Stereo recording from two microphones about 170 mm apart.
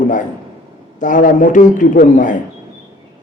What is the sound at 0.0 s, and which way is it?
A man's voice, 50° left (ahead or behind).